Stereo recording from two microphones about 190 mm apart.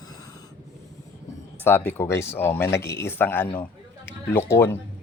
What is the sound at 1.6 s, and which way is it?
Speech, 10° left (ahead or behind).